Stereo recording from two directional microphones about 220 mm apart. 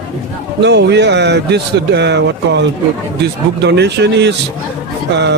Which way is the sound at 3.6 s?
50° right (ahead or behind).